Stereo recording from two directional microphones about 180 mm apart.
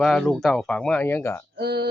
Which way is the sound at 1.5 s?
65° right (ahead or behind).